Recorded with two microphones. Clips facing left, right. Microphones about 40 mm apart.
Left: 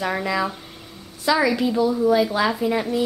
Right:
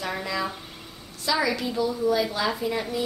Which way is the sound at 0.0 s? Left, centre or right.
Centre.